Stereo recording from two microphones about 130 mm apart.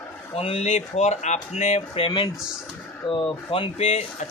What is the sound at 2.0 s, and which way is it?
Speech, 40° left (ahead or behind).